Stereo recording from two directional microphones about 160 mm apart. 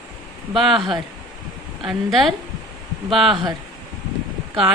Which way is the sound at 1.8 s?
Centre (ahead or behind).